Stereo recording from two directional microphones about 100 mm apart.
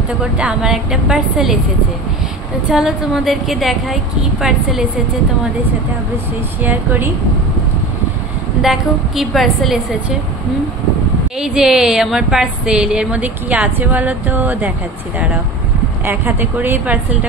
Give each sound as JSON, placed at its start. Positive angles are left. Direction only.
{"t": 0.2, "sound": "a woman's voice", "side_deg": -10}
{"t": 2.7, "sound": "a woman's voice", "side_deg": -5}
{"t": 6.6, "sound": "a woman's voice", "side_deg": -20}
{"t": 8.6, "sound": "a woman's voice", "side_deg": -5}
{"t": 11.3, "sound": "a woman's voice", "side_deg": -5}
{"t": 16.1, "sound": "a woman's voice", "side_deg": -20}